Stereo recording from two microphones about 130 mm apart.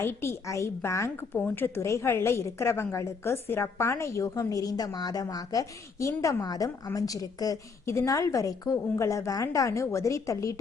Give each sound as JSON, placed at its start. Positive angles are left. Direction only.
{"t": 0.0, "sound": "a woman's voice", "side_deg": 20}